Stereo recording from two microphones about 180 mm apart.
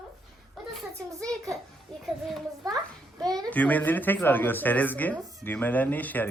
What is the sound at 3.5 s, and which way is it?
A child's voice, 10° left (ahead or behind).